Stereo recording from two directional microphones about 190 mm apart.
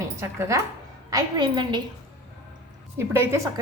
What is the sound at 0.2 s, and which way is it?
A woman's voice, 15° right (ahead or behind).